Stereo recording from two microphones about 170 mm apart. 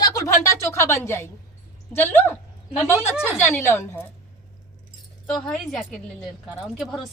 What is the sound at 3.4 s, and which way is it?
Speech, 15° left (ahead or behind).